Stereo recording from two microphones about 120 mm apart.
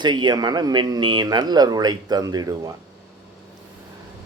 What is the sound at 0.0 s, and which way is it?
Speech, 40° right (ahead or behind).